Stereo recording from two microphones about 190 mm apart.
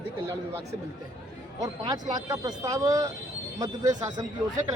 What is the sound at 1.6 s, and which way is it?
Speech, 20° right (ahead or behind).